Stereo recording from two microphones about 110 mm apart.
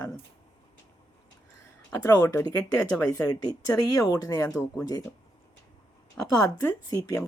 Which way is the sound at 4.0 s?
30° left (ahead or behind).